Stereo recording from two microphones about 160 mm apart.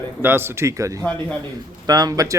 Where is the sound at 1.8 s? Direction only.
25° right (ahead or behind).